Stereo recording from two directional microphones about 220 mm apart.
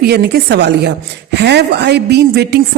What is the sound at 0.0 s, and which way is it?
Speech, 45° right (ahead or behind).